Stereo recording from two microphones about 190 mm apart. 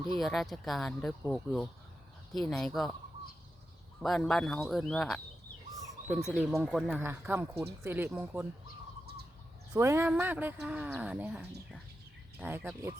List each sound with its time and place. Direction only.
0.2 s speech: centre (ahead or behind)
4.0 s speech: centre (ahead or behind)
9.7 s speech: 15° right (ahead or behind)